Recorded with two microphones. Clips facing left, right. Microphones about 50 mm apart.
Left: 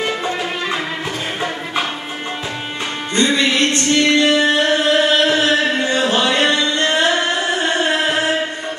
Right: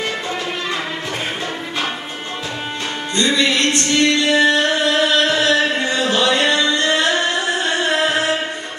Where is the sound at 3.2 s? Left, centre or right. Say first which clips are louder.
Left 1 dB; left.